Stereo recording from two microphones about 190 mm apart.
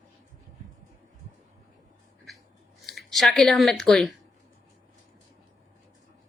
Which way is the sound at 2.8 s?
Centre (ahead or behind).